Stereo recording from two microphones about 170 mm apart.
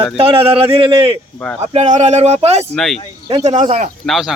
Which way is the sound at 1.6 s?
40° right (ahead or behind).